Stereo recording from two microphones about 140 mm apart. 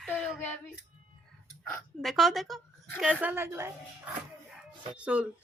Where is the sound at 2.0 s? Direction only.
Centre (ahead or behind).